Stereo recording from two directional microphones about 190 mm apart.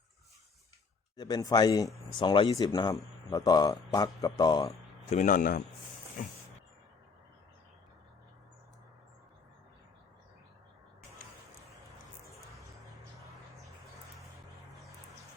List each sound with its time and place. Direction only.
1.1 s a man's voice: 20° left (ahead or behind)
5.0 s a man's voice: 40° left (ahead or behind)
12.3 s a sound: centre (ahead or behind)